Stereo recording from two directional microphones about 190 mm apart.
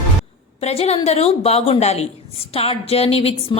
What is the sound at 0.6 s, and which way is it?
A woman's voice, 35° left (ahead or behind).